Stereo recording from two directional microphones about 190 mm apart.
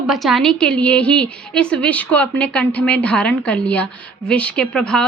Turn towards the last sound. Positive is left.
turn(degrees=5)  # may be behind; listen again after turning